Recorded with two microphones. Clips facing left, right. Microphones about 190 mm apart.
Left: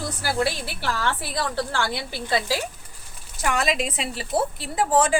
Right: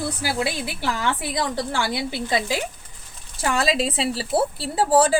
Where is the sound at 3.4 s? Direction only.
30° right (ahead or behind).